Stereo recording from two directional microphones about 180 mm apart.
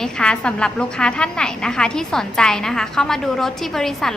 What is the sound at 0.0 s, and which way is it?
A woman's voice, 5° left (ahead or behind).